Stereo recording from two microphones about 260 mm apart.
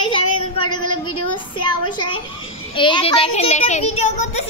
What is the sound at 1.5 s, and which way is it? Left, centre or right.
A woman's voice, centre.